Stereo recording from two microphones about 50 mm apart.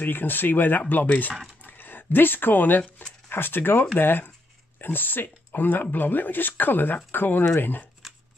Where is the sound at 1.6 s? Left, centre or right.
Left.